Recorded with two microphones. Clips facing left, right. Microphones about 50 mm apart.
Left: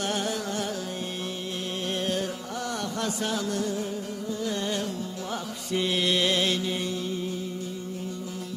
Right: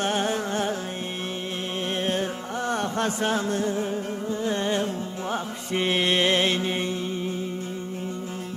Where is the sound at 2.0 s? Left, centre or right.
Right.